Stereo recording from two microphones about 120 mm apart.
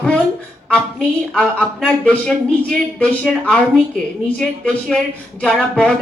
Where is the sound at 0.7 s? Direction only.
5° left (ahead or behind).